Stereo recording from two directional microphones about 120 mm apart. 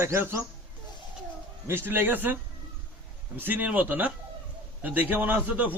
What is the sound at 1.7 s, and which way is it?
Speech, 20° right (ahead or behind).